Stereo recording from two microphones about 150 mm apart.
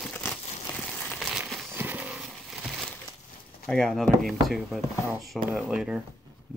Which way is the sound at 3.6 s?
5° left (ahead or behind).